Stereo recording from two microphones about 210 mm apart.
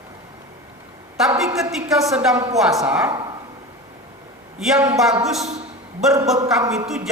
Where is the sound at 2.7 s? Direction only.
5° right (ahead or behind).